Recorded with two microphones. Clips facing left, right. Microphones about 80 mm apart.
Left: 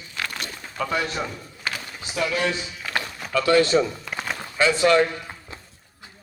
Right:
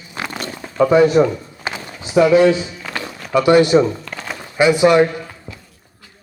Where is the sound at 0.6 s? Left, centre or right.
Right.